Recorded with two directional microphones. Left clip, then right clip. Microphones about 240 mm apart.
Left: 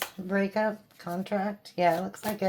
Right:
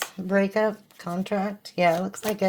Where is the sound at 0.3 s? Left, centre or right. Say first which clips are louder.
Right 5 dB; right.